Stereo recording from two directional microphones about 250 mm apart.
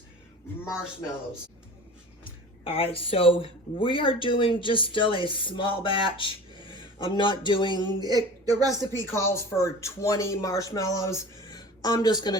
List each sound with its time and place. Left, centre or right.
2.6 s speech: left
8.0 s a man's voice: centre
9.1 s speech: centre